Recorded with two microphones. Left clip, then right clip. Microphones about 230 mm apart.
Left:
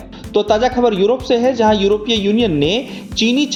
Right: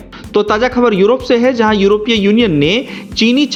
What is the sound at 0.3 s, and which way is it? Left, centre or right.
Speech, right.